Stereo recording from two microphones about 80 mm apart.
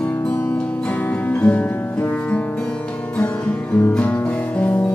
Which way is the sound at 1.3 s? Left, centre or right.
Centre.